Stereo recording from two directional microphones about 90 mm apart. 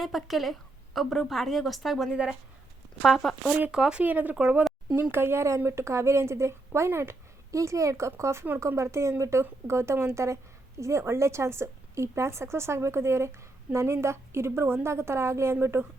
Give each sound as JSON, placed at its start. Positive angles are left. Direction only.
{"t": 0.0, "sound": "a woman's voice", "side_deg": 0}
{"t": 3.5, "sound": "speech", "side_deg": -10}
{"t": 5.1, "sound": "a woman's voice", "side_deg": -25}